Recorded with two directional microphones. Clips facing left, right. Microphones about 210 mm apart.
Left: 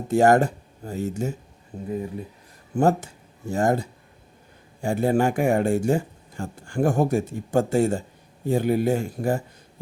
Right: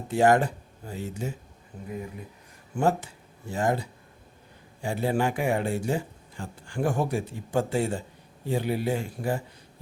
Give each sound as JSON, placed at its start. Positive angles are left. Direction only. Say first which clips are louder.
{"t": 0.1, "sound": "speech", "louder": "left 4 dB", "side_deg": 45}
{"t": 2.7, "sound": "speech", "louder": "left 4 dB", "side_deg": 45}